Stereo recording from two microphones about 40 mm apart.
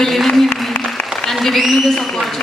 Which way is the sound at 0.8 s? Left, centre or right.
Left.